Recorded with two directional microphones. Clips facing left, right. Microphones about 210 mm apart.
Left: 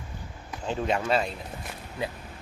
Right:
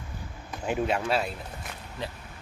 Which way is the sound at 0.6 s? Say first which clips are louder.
Even; 10° right (ahead or behind).